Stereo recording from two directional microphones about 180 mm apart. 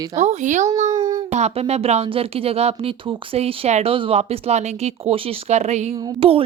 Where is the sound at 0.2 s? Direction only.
40° right (ahead or behind).